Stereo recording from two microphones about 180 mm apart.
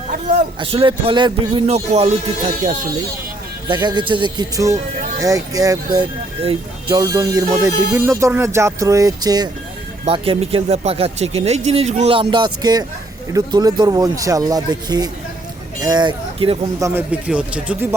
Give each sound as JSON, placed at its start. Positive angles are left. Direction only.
{"t": 0.6, "sound": "speech", "side_deg": -30}
{"t": 3.7, "sound": "speech", "side_deg": -25}
{"t": 16.8, "sound": "speech", "side_deg": -10}